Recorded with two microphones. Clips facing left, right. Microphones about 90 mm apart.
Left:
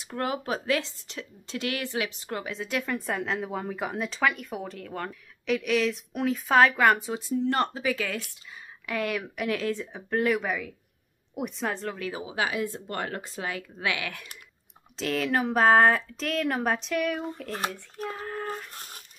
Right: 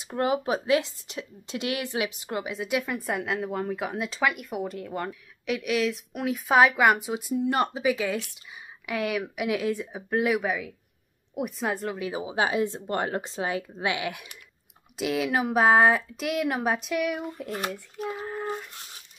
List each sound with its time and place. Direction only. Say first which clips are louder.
0.0 s speech: right 5 dB; 20° right (ahead or behind)
8.8 s speech: right 1 dB; 5° right (ahead or behind)
18.2 s child singing: right 2 dB; 5° right (ahead or behind)